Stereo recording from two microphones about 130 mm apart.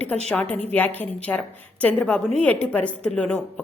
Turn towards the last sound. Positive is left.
turn(degrees=5)  # may be behind; listen again after turning